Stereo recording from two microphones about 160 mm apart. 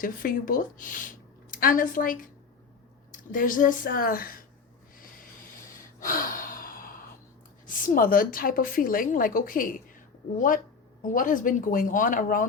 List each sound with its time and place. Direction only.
0.0 s speech: 60° left (ahead or behind)
3.3 s a woman's voice: 55° left (ahead or behind)
4.9 s a sound: 60° left (ahead or behind)
6.0 s gasp: 60° left (ahead or behind)
7.7 s a woman's voice: 60° left (ahead or behind)
11.0 s a woman's voice: 55° left (ahead or behind)